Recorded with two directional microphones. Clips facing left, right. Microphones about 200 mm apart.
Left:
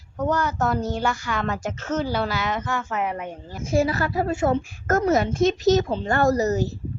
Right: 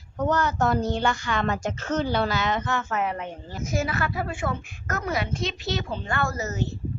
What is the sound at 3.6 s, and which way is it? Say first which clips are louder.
A woman's voice: left 6 dB; 30° left (ahead or behind).